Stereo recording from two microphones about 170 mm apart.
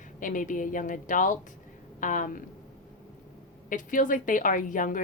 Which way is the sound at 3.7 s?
50° left (ahead or behind).